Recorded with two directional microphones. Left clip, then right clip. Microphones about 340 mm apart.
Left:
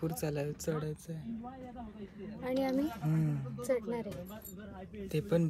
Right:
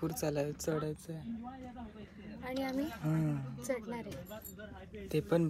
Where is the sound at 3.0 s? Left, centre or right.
Centre.